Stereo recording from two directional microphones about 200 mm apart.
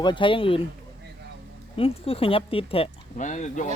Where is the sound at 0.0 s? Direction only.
25° left (ahead or behind).